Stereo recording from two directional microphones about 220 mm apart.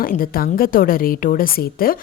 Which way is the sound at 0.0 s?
40° left (ahead or behind).